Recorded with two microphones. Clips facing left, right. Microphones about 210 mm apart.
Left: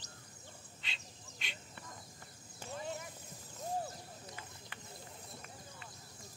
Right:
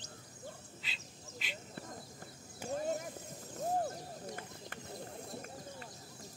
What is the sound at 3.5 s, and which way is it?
Owl, 50° right (ahead or behind).